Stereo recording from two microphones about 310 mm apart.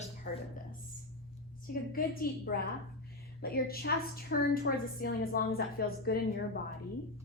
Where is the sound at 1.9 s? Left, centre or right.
Left.